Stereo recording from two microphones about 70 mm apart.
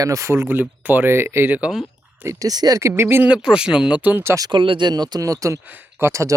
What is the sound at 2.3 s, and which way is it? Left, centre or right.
Speech, right.